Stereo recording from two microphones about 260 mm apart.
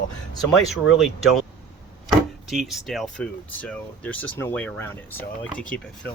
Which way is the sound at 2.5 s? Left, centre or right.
Centre.